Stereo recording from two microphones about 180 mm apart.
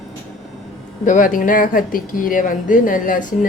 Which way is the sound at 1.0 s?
45° left (ahead or behind).